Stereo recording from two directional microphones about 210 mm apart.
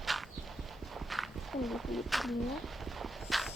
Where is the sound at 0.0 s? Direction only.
Centre (ahead or behind).